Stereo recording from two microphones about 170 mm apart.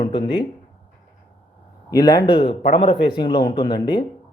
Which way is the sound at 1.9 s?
25° left (ahead or behind).